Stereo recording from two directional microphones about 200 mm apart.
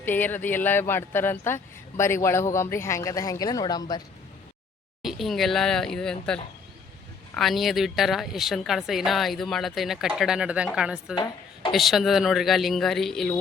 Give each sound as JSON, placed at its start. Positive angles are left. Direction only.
{"t": 0.0, "sound": "speech", "side_deg": 10}
{"t": 5.0, "sound": "speech", "side_deg": 0}
{"t": 11.1, "sound": "a sound", "side_deg": 20}
{"t": 11.7, "sound": "speech", "side_deg": 0}